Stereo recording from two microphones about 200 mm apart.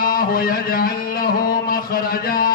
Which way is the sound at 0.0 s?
45° left (ahead or behind).